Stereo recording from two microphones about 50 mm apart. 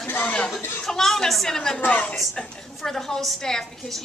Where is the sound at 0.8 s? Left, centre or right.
Centre.